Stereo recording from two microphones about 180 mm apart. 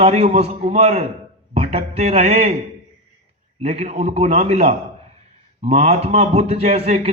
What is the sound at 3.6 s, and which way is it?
A man's voice, 35° right (ahead or behind).